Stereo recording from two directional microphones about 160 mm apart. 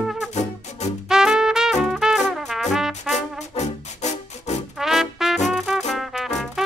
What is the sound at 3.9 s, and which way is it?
Music, 45° left (ahead or behind).